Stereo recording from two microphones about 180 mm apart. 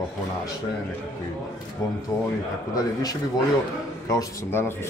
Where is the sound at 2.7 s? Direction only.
20° left (ahead or behind).